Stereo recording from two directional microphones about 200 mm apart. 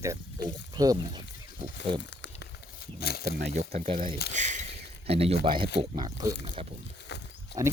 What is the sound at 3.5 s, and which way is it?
Speech, 35° right (ahead or behind).